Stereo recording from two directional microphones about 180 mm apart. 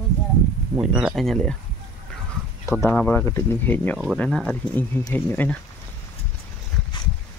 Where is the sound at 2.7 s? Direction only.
10° left (ahead or behind).